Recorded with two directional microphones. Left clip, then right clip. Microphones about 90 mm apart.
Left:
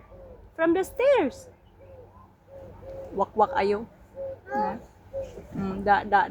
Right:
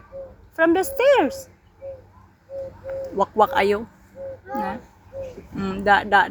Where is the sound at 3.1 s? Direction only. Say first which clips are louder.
Right 5 dB; 30° right (ahead or behind).